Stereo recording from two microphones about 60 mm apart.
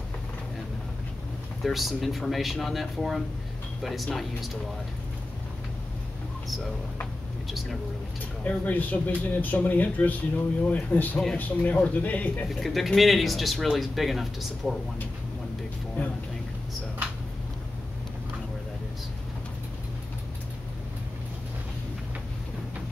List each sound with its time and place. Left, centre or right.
1.6 s speech: centre
8.5 s speech: left
12.4 s speech: centre